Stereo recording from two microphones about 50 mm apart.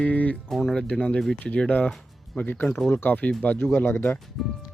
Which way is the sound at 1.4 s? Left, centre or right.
Left.